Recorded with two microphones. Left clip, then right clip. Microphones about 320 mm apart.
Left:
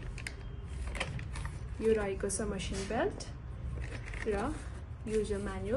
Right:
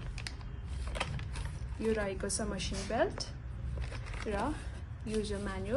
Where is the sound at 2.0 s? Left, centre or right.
Right.